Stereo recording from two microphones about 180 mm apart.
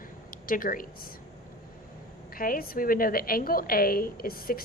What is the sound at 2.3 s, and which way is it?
A woman's voice, 55° left (ahead or behind).